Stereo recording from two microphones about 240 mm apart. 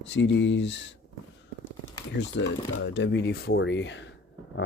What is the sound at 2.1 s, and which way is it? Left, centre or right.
Speech, left.